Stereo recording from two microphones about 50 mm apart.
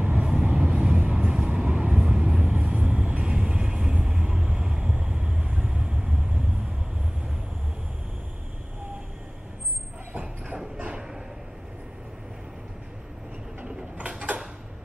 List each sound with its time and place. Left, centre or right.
0.0 s vehicle: right
10.1 s train: centre
10.8 s bow-wow: centre